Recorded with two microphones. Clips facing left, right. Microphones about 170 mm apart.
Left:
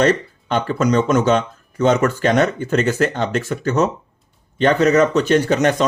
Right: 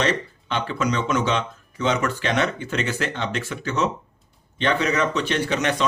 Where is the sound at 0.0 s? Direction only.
45° left (ahead or behind).